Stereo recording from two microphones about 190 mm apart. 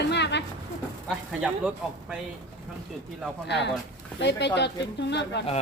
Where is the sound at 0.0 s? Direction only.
65° left (ahead or behind).